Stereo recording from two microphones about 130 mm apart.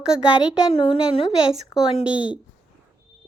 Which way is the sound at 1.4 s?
5° right (ahead or behind).